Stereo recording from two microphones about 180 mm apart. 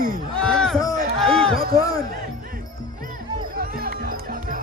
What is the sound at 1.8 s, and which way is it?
Music, 20° left (ahead or behind).